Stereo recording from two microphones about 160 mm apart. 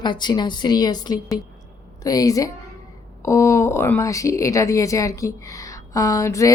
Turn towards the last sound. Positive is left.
turn(degrees=20)  # may be behind; listen again after turning